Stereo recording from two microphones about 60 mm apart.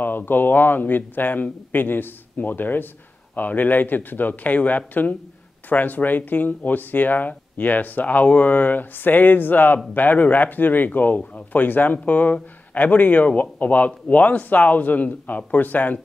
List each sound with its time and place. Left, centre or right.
0.0 s speech: left